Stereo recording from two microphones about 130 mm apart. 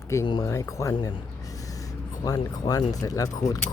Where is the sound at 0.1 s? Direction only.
20° left (ahead or behind).